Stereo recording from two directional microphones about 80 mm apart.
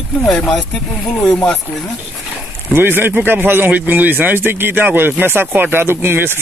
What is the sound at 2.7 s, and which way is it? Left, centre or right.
Speech, right.